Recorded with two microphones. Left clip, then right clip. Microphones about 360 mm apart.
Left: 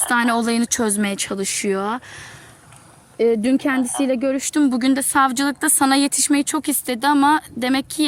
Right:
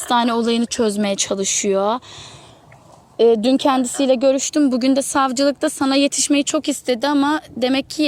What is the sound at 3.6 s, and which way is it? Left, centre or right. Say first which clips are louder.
Speech: right 7 dB; right.